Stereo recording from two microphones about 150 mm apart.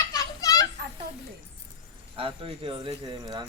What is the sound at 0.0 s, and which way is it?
Children playing, 25° left (ahead or behind).